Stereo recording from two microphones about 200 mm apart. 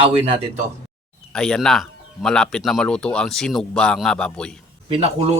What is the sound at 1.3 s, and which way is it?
Speech, 5° left (ahead or behind).